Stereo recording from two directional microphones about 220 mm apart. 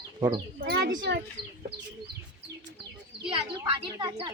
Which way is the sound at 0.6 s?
50° right (ahead or behind).